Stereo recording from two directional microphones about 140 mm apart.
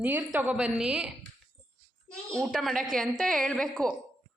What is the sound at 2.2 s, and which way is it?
A woman's voice, 5° left (ahead or behind).